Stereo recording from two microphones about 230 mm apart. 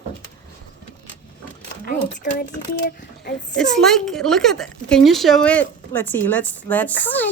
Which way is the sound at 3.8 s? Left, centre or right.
Centre.